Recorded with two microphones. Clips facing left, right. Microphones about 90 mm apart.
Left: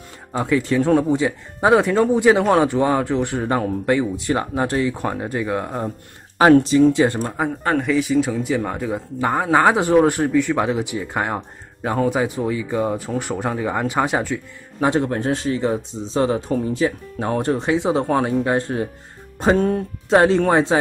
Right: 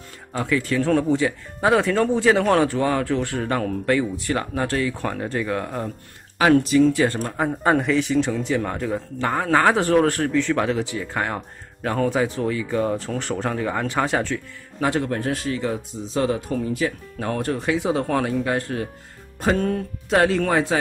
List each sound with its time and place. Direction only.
0.3 s speech: 20° left (ahead or behind)
6.3 s speech: 30° left (ahead or behind)
7.6 s speech: 10° right (ahead or behind)
7.9 s a man's voice: 5° left (ahead or behind); by 20.8 s 25° left (ahead or behind)